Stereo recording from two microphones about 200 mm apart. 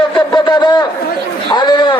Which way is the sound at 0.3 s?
20° left (ahead or behind).